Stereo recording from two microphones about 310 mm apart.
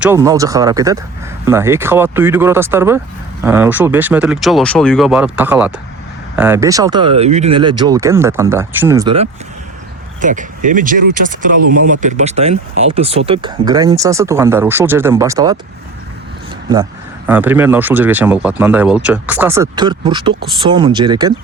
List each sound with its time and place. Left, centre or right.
0.0 s speech: centre
10.2 s speech: right
17.2 s speech: centre